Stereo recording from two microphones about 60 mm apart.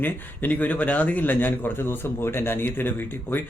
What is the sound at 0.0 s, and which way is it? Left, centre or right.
A man's voice, left.